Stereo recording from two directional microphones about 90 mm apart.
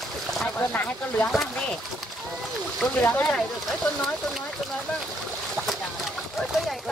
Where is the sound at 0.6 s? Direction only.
20° left (ahead or behind).